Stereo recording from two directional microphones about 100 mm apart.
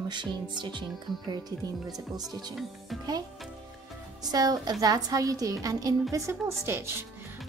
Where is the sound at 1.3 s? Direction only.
40° right (ahead or behind).